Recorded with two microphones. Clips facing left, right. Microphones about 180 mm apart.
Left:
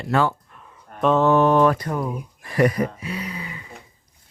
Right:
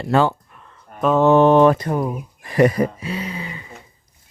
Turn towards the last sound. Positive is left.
turn(degrees=-25)  # may be behind; listen again after turning